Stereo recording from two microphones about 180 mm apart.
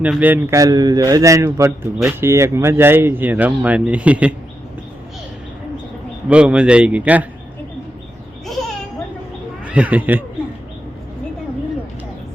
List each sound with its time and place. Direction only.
0.0 s speech: 10° right (ahead or behind)
6.2 s speech: 5° right (ahead or behind)
9.6 s speech: 10° right (ahead or behind)